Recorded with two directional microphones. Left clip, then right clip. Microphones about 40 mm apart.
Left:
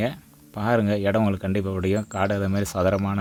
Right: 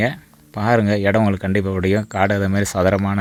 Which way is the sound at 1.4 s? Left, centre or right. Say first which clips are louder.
Right 6 dB; right.